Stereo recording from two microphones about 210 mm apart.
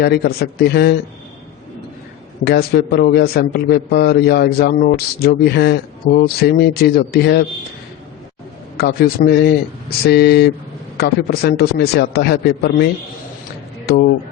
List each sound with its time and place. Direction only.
0.0 s a man's voice: 50° left (ahead or behind)
2.4 s a man's voice: 50° left (ahead or behind)
8.8 s a man's voice: 50° left (ahead or behind)